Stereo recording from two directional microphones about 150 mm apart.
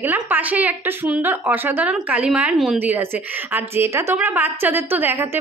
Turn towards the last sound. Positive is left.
turn(degrees=-15)  # may be behind; listen again after turning